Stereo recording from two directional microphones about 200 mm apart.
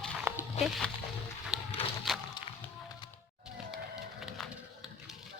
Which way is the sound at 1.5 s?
5° right (ahead or behind).